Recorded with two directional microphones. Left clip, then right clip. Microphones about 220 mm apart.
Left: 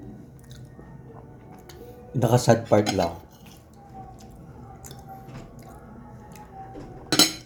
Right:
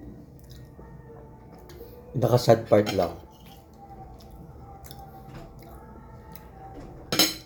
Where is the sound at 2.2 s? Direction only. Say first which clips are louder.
Left 1 dB; 25° left (ahead or behind).